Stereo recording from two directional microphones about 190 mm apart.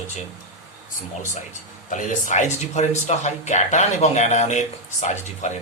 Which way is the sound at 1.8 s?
40° left (ahead or behind).